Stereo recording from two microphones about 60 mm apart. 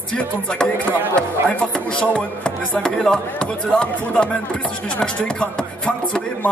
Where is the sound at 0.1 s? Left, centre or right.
Centre.